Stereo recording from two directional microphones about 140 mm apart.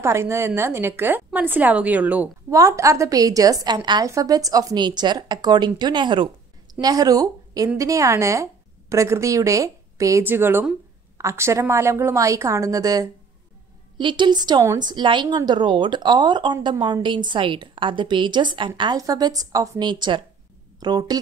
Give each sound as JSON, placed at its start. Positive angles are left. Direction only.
{"t": 0.0, "sound": "a woman's voice", "side_deg": -20}
{"t": 2.5, "sound": "a woman's voice", "side_deg": -25}